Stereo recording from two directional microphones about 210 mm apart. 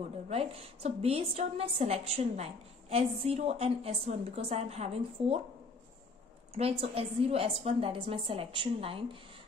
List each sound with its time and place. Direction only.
0.3 s a woman's voice: 30° right (ahead or behind)
6.5 s a woman's voice: 25° right (ahead or behind)